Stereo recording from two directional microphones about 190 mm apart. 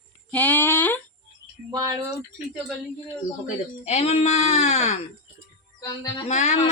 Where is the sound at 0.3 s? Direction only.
10° left (ahead or behind).